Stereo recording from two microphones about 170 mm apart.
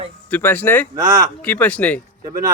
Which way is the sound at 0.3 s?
10° left (ahead or behind).